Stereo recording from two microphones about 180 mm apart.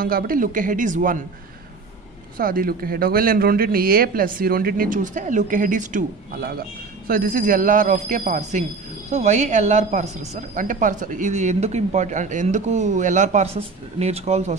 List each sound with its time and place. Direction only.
0.0 s speech: 50° right (ahead or behind)
2.3 s speech: 50° right (ahead or behind); by 14.5 s 35° right (ahead or behind)